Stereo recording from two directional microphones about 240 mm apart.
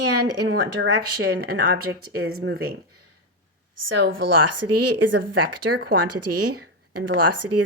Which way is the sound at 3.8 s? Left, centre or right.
Right.